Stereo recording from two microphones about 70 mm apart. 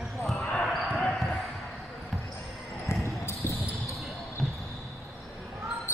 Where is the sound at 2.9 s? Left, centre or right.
Left.